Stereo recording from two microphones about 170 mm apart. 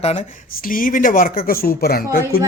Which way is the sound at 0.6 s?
55° left (ahead or behind).